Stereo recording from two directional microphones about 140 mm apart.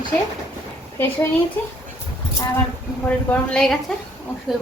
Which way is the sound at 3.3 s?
10° left (ahead or behind).